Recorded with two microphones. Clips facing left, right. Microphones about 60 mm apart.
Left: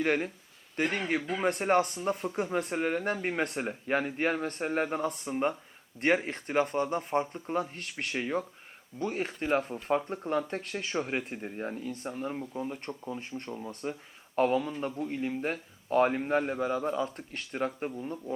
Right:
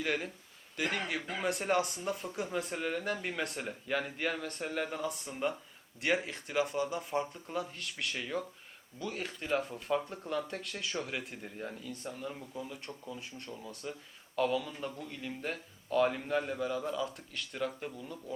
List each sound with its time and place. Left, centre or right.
0.0 s speech: left